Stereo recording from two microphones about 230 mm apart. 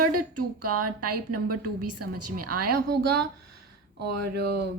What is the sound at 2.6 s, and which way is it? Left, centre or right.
Speech, right.